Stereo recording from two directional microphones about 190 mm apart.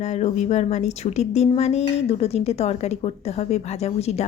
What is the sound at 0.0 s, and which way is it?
A woman's voice, 35° left (ahead or behind).